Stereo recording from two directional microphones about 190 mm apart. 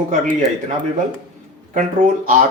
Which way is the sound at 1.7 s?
45° right (ahead or behind).